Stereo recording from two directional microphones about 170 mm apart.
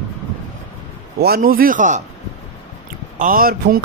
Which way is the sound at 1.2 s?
65° right (ahead or behind).